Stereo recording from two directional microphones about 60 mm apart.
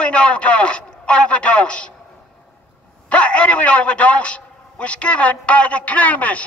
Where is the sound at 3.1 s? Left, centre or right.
Left.